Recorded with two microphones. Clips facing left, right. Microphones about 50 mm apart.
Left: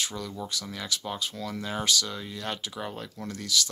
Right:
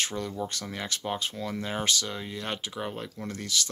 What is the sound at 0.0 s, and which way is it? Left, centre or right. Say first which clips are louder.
Speech: right 3 dB; right.